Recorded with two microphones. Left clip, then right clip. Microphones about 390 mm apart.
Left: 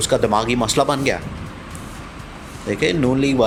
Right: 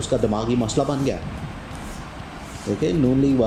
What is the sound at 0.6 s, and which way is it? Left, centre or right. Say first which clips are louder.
Speech: left 5 dB; left.